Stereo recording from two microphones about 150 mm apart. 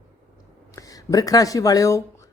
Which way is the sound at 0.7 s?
25° left (ahead or behind).